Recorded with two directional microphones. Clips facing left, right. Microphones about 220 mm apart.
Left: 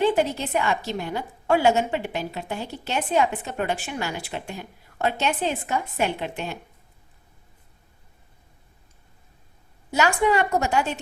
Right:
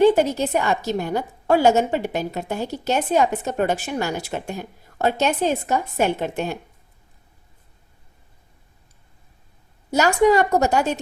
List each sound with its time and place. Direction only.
0.0 s a woman's voice: 40° right (ahead or behind)
9.9 s a woman's voice: 40° right (ahead or behind)